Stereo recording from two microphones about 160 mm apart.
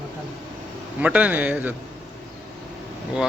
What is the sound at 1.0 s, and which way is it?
Speech, 10° right (ahead or behind).